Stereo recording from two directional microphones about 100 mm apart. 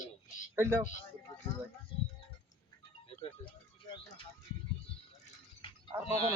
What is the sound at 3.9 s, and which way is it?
Music, 50° left (ahead or behind).